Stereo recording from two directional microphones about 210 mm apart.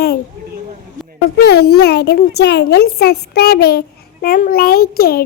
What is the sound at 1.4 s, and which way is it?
A child's voice, 50° left (ahead or behind).